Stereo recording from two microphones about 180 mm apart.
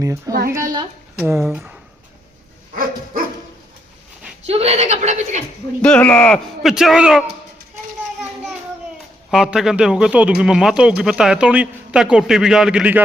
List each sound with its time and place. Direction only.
0.0 s a child's voice: 20° right (ahead or behind)
1.4 s a man's voice: centre (ahead or behind)
2.7 s dog: 50° right (ahead or behind)
4.4 s speech: 35° right (ahead or behind)
5.8 s a man's voice: 5° left (ahead or behind)
9.3 s a man's voice: centre (ahead or behind)